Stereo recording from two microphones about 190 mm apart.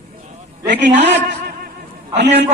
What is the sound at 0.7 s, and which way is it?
Speech, 65° right (ahead or behind).